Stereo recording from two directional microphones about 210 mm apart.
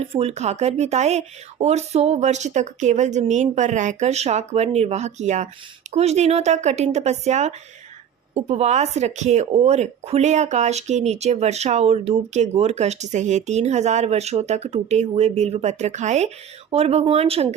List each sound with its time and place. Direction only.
0.0 s speech: 30° right (ahead or behind)